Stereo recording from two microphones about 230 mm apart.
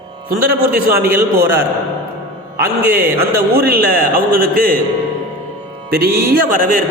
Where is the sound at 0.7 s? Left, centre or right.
Right.